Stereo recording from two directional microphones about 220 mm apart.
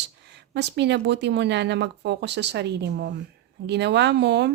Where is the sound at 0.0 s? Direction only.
50° right (ahead or behind).